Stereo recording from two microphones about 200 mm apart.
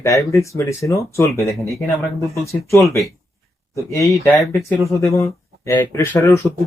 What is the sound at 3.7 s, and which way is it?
Speech, 15° left (ahead or behind).